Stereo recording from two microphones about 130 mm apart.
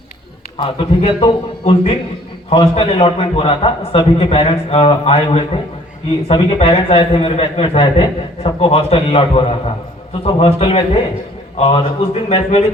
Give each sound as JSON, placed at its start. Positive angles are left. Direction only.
{"t": 0.5, "sound": "a man's voice", "side_deg": 45}